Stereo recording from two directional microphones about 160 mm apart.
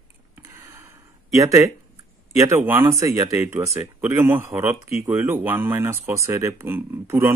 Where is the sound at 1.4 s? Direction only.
20° right (ahead or behind).